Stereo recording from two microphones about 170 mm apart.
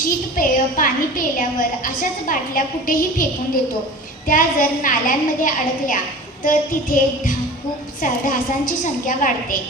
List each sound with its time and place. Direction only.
0.3 s a woman's voice: 55° left (ahead or behind)
4.3 s a woman's voice: 50° left (ahead or behind)